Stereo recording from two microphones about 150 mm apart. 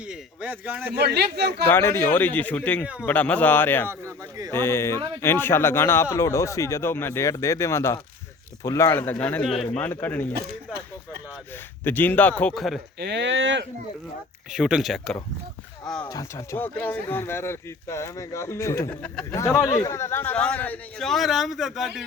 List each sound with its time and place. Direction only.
0.1 s a sound: 10° right (ahead or behind)
0.9 s speech: 90° right
1.6 s speech: 15° left (ahead or behind)
3.8 s speech: 20° right (ahead or behind)
4.5 s speech: 15° left (ahead or behind)
11.8 s speech: 10° left (ahead or behind)
14.5 s a man's voice: 5° right (ahead or behind)
16.0 s speech: 25° left (ahead or behind)
16.6 s a man's voice: 10° left (ahead or behind)